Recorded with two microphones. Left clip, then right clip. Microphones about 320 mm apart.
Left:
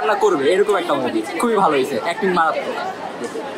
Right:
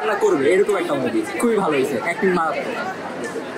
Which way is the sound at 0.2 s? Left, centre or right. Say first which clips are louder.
Left 1 dB; centre.